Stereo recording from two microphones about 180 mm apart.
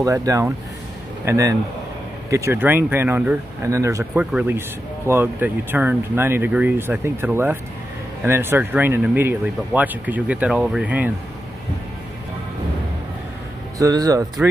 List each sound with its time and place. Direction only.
0.0 s speech: 20° right (ahead or behind)
13.7 s speech: 20° right (ahead or behind)